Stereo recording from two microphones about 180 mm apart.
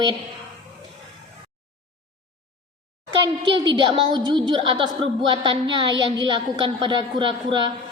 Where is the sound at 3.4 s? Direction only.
80° right.